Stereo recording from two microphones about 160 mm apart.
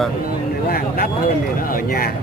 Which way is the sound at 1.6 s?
65° left (ahead or behind).